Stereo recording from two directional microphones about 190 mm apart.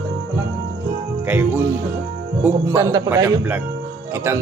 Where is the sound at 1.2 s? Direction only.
10° right (ahead or behind).